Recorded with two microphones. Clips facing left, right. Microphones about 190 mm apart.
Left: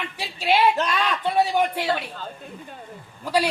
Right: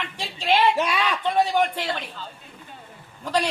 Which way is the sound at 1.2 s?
10° left (ahead or behind).